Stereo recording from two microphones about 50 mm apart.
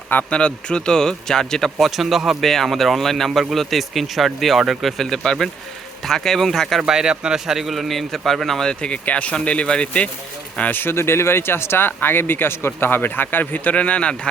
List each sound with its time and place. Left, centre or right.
0.3 s speech: left
1.8 s a man's voice: centre
5.0 s a man's voice: centre
6.8 s a man's voice: centre
8.8 s speech: left
10.6 s speech: left
10.9 s speech: left